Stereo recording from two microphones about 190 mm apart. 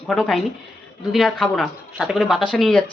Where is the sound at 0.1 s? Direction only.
5° left (ahead or behind).